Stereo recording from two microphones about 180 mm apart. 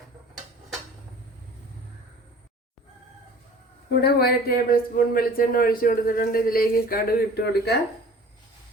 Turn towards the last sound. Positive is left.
turn(degrees=65)  # may be behind; listen again after turning